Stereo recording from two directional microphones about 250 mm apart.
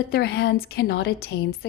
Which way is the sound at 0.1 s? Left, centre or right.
Left.